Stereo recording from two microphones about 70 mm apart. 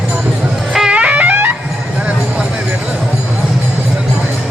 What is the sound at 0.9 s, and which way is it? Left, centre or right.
Music, centre.